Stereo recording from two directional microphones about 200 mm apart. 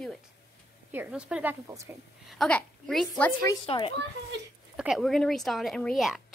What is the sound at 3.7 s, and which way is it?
Speech, 25° left (ahead or behind).